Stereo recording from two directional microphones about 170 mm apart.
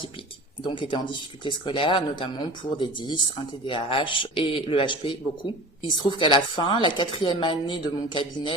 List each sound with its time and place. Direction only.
0.6 s a man's voice: 30° left (ahead or behind)